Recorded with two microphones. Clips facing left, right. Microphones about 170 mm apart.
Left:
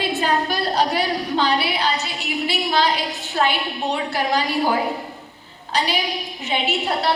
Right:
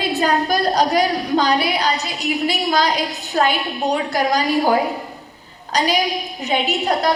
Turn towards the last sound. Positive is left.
turn(degrees=-40)  # may be behind; listen again after turning